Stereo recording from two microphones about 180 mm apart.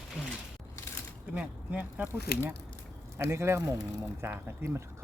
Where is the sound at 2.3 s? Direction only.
60° left (ahead or behind).